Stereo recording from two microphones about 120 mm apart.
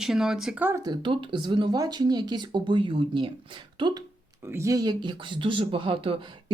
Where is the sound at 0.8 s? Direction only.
35° right (ahead or behind).